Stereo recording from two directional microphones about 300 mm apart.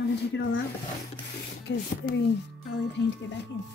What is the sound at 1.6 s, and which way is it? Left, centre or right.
A woman's voice, left.